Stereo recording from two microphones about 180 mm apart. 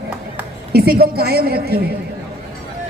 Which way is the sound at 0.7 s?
60° right (ahead or behind).